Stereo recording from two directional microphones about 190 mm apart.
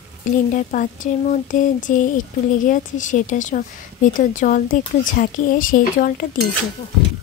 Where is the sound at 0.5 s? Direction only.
45° left (ahead or behind).